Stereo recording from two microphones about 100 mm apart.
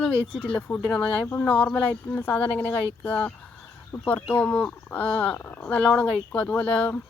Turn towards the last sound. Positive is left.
turn(degrees=15)  # may be behind; listen again after turning